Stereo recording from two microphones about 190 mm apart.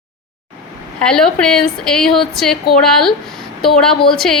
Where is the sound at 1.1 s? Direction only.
5° left (ahead or behind).